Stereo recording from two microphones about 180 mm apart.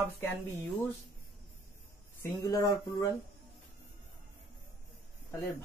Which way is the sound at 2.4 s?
20° left (ahead or behind).